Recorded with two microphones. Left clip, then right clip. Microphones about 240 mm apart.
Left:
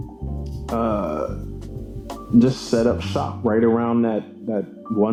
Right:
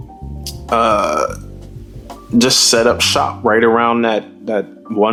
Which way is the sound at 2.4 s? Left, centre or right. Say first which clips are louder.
Right 8 dB; centre.